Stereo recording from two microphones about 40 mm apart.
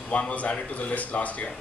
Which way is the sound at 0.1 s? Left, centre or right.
Left.